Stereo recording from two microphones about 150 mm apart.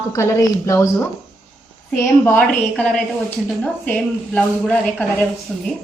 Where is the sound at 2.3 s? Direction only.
5° left (ahead or behind).